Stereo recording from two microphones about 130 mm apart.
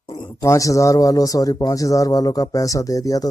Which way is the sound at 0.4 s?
25° left (ahead or behind).